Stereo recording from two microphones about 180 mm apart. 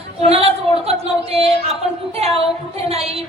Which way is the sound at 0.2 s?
35° right (ahead or behind).